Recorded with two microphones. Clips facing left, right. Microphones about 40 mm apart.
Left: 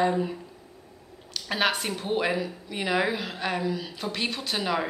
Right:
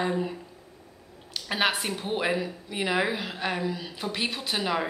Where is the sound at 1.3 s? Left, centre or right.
Centre.